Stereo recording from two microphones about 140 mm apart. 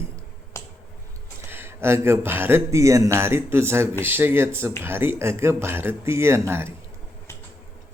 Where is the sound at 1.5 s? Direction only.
15° right (ahead or behind).